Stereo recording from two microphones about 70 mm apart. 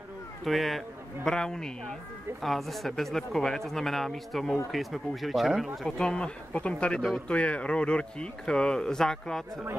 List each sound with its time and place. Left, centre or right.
0.5 s speech: centre
5.9 s speech: centre